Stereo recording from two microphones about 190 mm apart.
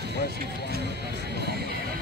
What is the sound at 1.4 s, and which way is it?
Music, 60° right (ahead or behind).